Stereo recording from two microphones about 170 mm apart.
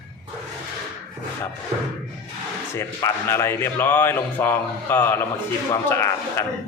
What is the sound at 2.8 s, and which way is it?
Speech, 15° left (ahead or behind).